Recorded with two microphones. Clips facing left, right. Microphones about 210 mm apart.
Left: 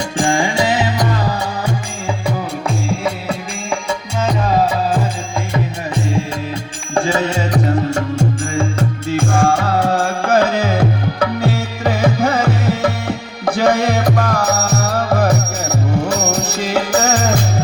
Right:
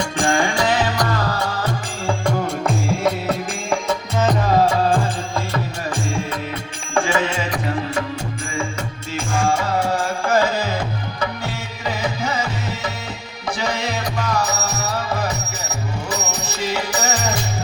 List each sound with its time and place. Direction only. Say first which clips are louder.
0.2 s music: left 3 dB; 25° left (ahead or behind)
1.6 s music: left 2 dB; 5° left (ahead or behind)
6.9 s music: left 3 dB; 35° left (ahead or behind); by 17.4 s 55° left (ahead or behind)